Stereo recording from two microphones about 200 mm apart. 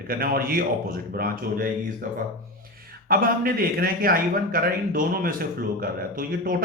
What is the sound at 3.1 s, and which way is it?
A man's voice, 45° right (ahead or behind).